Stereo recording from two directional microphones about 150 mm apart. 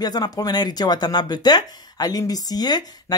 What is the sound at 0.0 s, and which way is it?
A woman's voice, 25° left (ahead or behind).